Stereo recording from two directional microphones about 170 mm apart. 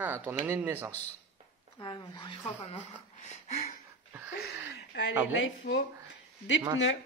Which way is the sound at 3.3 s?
40° left (ahead or behind).